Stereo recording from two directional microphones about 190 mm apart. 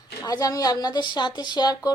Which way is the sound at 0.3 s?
20° left (ahead or behind).